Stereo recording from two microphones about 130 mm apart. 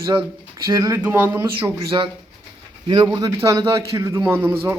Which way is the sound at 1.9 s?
35° right (ahead or behind).